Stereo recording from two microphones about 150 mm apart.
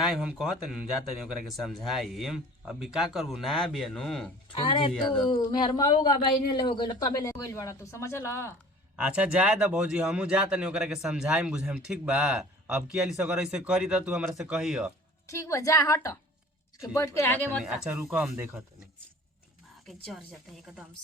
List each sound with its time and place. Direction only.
0.0 s a man's voice: 5° right (ahead or behind)
4.5 s speech: 35° left (ahead or behind)
7.3 s speech: 20° left (ahead or behind)
9.0 s speech: 5° right (ahead or behind)
15.3 s speech: 20° left (ahead or behind)
17.6 s speech: 5° right (ahead or behind)
20.1 s a man's voice: 5° right (ahead or behind)